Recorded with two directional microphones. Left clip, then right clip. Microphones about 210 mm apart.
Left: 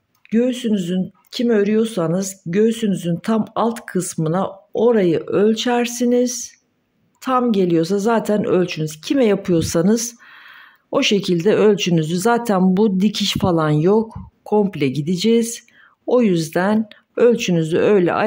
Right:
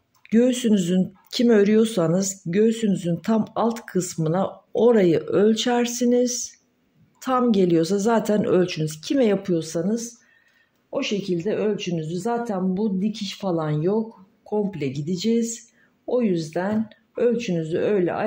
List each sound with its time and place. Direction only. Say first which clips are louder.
0.3 s speech: left 1 dB; 5° left (ahead or behind); by 18.2 s 30° left (ahead or behind)